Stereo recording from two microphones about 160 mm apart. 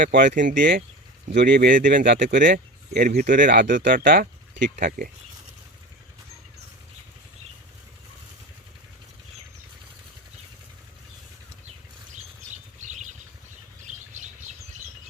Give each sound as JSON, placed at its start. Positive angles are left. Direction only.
{"t": 0.1, "sound": "speech", "side_deg": -55}
{"t": 1.3, "sound": "speech", "side_deg": -65}
{"t": 12.5, "sound": "a sound", "side_deg": -50}
{"t": 13.8, "sound": "bird", "side_deg": -50}